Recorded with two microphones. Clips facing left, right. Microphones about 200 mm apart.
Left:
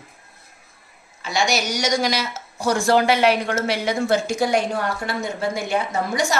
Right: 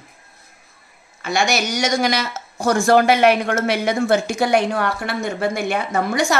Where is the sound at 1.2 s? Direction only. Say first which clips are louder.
Right 2 dB; 55° right (ahead or behind).